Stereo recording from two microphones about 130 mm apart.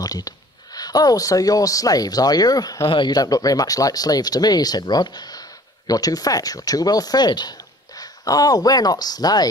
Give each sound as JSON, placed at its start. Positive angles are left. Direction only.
{"t": 0.0, "sound": "speech", "side_deg": 30}